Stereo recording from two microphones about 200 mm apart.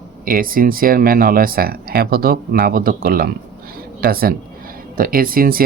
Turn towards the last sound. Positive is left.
turn(degrees=-45)  # may be behind; listen again after turning